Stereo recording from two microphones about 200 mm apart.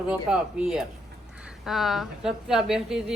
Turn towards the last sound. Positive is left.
turn(degrees=0)  # may be behind; listen again after turning